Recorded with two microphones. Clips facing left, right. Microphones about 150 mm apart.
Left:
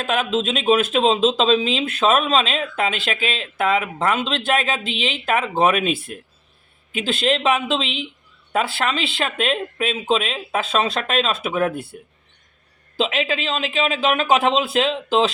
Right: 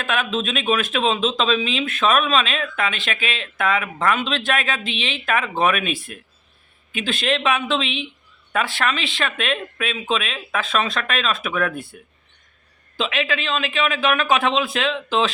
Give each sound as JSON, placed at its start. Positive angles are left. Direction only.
{"t": 0.0, "sound": "a man's voice", "side_deg": 30}
{"t": 13.2, "sound": "a man's voice", "side_deg": 30}